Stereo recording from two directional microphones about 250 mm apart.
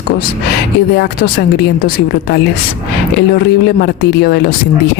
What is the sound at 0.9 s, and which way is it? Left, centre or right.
Speech, left.